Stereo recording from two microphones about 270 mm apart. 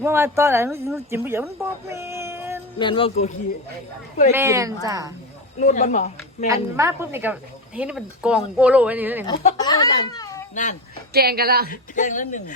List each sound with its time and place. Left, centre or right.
0.0 s speech: centre
2.7 s speech: centre
4.4 s a woman's voice: centre
5.5 s speech: left
6.5 s a woman's voice: centre
9.2 s speech: left
10.5 s speech: left
11.1 s a woman's voice: right
11.7 s speech: left